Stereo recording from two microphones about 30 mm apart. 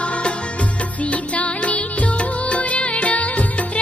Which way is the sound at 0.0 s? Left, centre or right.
Left.